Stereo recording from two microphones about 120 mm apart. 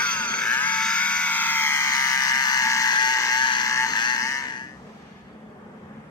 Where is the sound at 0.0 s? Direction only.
10° left (ahead or behind); by 4.7 s 35° left (ahead or behind).